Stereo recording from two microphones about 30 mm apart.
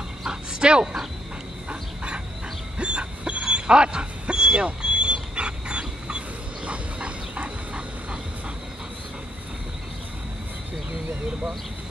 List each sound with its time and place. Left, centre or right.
0.3 s speech: right
1.7 s a sound: right
2.8 s dog: right